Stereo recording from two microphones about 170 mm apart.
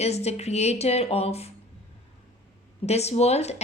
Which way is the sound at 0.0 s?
40° left (ahead or behind).